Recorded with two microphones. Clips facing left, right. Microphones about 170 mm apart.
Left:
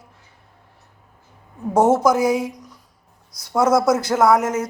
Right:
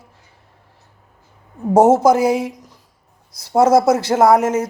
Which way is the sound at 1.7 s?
30° right (ahead or behind).